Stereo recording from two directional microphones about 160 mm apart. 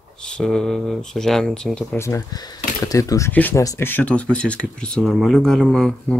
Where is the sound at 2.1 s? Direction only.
20° left (ahead or behind).